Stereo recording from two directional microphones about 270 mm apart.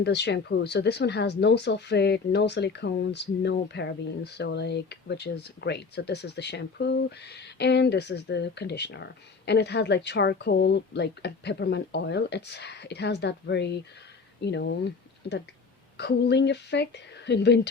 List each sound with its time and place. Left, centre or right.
0.0 s speech: left